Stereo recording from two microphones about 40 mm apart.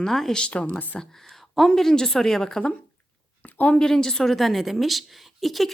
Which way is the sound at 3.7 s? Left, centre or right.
Centre.